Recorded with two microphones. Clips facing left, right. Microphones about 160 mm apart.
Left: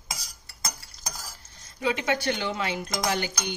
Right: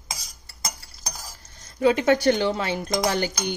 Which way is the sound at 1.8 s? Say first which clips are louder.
Right 8 dB; 45° right (ahead or behind).